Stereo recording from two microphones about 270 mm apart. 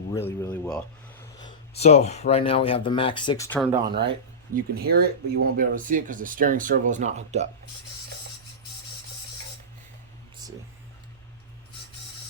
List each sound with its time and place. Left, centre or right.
0.1 s a sound: centre
1.4 s speech: centre
3.8 s speech: centre
4.5 s speech: right